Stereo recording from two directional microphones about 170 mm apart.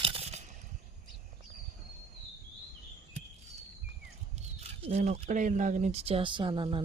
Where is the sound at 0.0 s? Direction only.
35° right (ahead or behind).